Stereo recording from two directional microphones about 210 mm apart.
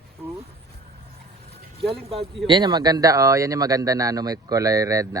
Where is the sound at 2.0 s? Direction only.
30° right (ahead or behind).